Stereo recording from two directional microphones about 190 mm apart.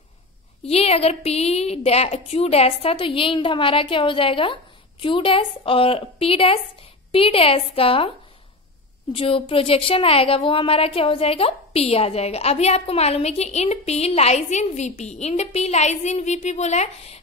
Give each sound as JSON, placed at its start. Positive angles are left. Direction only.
{"t": 0.7, "sound": "a woman's voice", "side_deg": 30}
{"t": 9.1, "sound": "speech", "side_deg": 30}